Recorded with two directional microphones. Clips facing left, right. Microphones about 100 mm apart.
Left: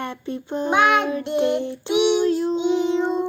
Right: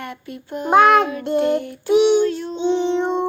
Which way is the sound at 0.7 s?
40° right (ahead or behind).